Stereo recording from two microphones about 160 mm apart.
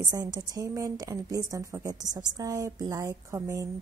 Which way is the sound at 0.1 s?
25° right (ahead or behind).